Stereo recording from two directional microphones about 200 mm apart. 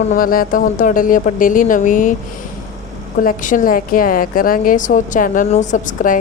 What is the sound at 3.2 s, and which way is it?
A woman's voice, 40° left (ahead or behind).